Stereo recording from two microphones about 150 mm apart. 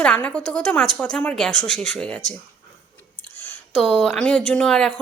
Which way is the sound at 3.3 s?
10° left (ahead or behind).